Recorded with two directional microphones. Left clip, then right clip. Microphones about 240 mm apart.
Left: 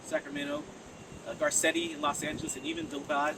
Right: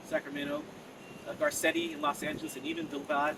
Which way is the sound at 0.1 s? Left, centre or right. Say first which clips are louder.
Even; centre.